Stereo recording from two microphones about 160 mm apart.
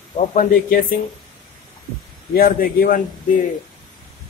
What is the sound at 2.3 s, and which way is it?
Speech, 65° left (ahead or behind).